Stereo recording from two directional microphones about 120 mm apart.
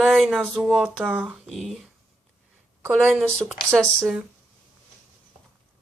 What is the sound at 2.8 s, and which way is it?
Speech, 20° right (ahead or behind).